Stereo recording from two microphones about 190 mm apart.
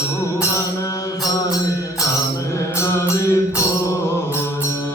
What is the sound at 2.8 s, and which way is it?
Mantra, 15° left (ahead or behind).